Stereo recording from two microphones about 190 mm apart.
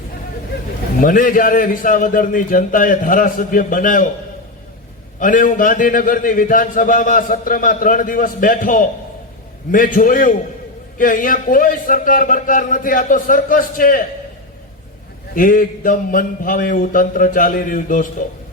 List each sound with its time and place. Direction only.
1.0 s a man's voice: 45° left (ahead or behind)
5.2 s a man's voice: 45° left (ahead or behind)
15.4 s a man's voice: 45° left (ahead or behind)